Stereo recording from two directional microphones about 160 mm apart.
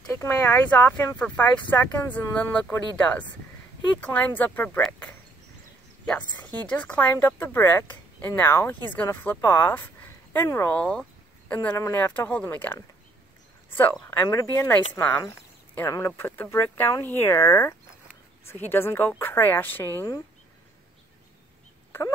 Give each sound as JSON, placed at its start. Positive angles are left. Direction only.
{"t": 0.1, "sound": "speech", "side_deg": 15}
{"t": 13.7, "sound": "a sound", "side_deg": 10}
{"t": 14.0, "sound": "speech", "side_deg": 15}